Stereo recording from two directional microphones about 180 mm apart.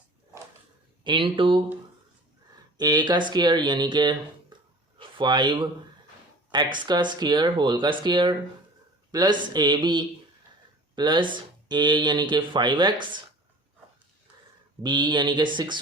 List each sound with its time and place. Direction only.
1.0 s speech: 25° right (ahead or behind)
2.7 s speech: 20° right (ahead or behind)
14.8 s speech: 25° right (ahead or behind)